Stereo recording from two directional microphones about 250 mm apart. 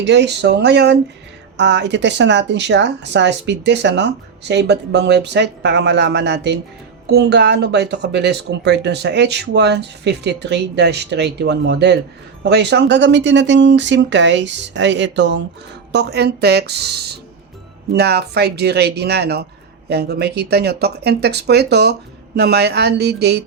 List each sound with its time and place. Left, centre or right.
0.0 s speech: right